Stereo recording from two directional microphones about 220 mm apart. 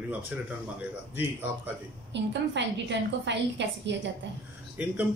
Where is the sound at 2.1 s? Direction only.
50° right (ahead or behind).